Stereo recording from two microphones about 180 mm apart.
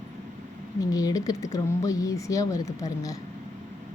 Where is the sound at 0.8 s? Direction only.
20° left (ahead or behind).